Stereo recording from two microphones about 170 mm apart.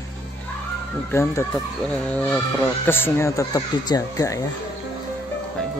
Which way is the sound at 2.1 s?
10° left (ahead or behind).